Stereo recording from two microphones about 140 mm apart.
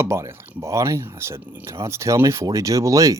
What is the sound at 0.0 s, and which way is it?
Speech, 20° right (ahead or behind).